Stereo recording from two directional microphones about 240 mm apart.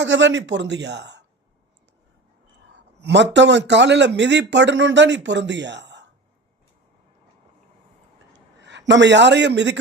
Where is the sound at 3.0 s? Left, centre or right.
Right.